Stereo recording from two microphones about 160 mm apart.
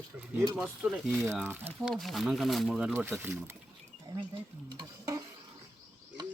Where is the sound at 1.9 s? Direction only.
Centre (ahead or behind); by 3.5 s 15° right (ahead or behind).